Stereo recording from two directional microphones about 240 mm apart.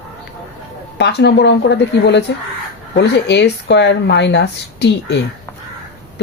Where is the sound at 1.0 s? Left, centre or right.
Left.